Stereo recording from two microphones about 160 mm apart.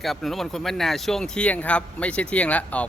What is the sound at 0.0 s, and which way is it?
Speech, centre (ahead or behind).